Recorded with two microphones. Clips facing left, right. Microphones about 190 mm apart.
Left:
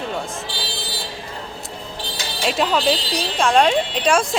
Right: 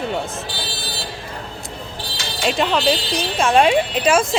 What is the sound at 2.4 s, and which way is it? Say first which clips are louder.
A woman's voice: right 1 dB; centre (ahead or behind).